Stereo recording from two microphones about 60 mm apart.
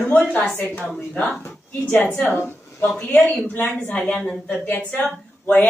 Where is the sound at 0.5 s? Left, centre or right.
Left.